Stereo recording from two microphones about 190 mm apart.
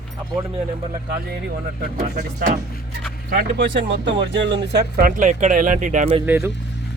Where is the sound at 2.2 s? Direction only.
50° right (ahead or behind); by 4.1 s 65° right (ahead or behind).